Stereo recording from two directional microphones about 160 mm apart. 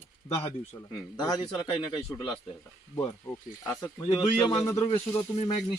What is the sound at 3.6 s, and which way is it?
A man's voice, 15° left (ahead or behind).